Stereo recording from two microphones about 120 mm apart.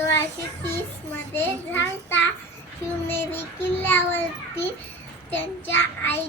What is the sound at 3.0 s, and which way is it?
A child's voice, 20° left (ahead or behind).